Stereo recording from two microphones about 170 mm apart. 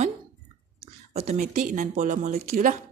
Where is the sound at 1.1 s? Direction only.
40° right (ahead or behind).